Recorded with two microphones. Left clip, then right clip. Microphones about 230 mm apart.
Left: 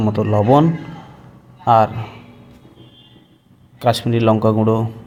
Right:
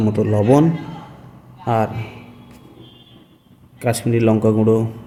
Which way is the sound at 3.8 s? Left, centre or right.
Centre.